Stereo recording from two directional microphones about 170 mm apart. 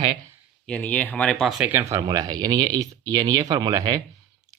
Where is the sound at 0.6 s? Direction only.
5° left (ahead or behind).